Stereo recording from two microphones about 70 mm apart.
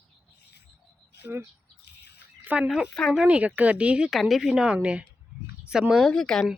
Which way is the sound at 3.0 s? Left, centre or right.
Centre.